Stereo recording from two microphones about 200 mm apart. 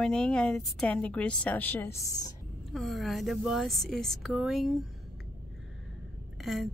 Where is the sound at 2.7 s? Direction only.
Centre (ahead or behind).